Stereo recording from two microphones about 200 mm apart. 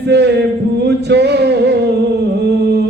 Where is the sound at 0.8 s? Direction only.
55° right (ahead or behind).